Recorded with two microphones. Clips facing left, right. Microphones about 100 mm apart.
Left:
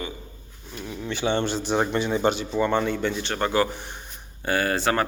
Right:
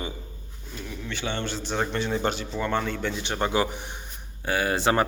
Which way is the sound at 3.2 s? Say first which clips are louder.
Even; 15° right (ahead or behind).